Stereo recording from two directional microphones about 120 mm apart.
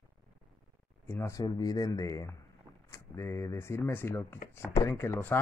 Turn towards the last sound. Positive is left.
turn(degrees=20)  # may be behind; listen again after turning